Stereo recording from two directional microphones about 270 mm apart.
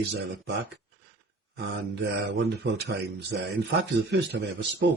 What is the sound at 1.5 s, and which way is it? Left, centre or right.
Speech, right.